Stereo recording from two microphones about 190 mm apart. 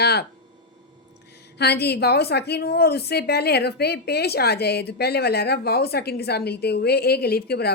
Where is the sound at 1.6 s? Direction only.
60° left (ahead or behind).